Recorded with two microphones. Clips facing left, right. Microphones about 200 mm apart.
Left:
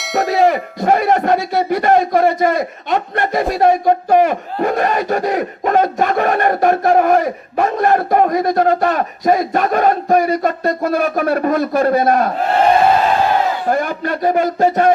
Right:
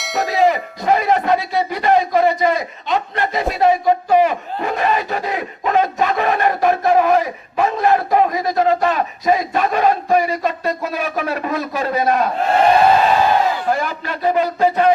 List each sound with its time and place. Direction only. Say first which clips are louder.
0.0 s a sound: left 4 dB; centre (ahead or behind)
0.4 s speech: left 2 dB; 50° left (ahead or behind)
13.7 s speech: left 3 dB; 50° left (ahead or behind)